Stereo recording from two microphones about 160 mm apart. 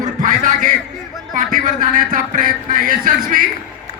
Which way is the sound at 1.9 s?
55° right (ahead or behind).